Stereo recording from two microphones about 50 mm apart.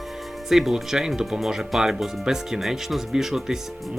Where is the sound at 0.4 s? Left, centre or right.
Centre.